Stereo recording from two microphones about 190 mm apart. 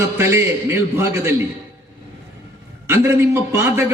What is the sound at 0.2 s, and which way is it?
A man's voice, 15° right (ahead or behind).